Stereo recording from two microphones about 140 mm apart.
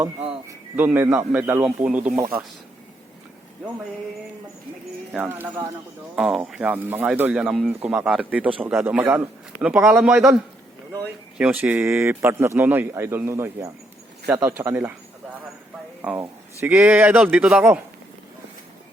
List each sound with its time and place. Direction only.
0.4 s a man's voice: 15° right (ahead or behind)
5.1 s a man's voice: 10° right (ahead or behind)
6.1 s a man's voice: 5° right (ahead or behind)
9.0 s a man's voice: 5° right (ahead or behind)
11.3 s a man's voice: 10° right (ahead or behind)
16.2 s a man's voice: 15° right (ahead or behind)